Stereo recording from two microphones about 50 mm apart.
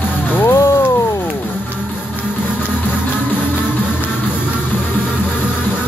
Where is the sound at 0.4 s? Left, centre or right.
Left.